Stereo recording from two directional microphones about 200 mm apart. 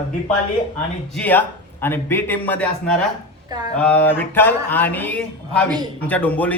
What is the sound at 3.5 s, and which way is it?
Speech, 20° right (ahead or behind).